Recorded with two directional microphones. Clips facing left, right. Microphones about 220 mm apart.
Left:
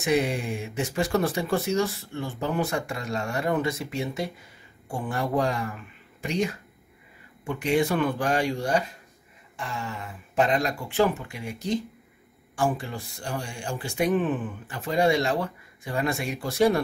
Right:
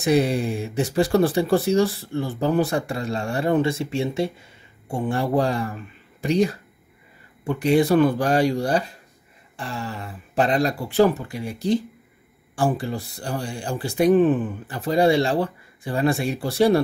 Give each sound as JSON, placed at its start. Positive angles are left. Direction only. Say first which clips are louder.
{"t": 0.0, "sound": "speech", "louder": "right 5 dB", "side_deg": -35}